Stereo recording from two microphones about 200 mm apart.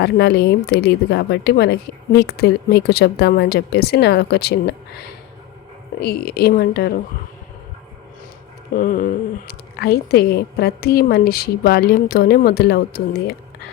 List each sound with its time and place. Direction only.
0.0 s speech: 55° left (ahead or behind)
8.7 s speech: 45° left (ahead or behind)